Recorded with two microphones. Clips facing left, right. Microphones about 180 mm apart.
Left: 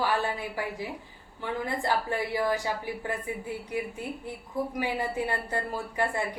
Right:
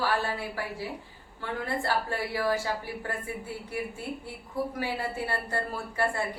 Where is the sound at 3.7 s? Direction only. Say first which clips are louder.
Even; 15° left (ahead or behind).